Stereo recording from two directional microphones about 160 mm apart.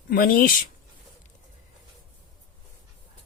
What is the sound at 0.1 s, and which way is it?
Speech, 65° left (ahead or behind).